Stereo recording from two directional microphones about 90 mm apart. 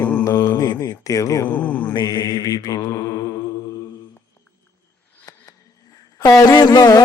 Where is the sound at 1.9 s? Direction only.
50° left (ahead or behind).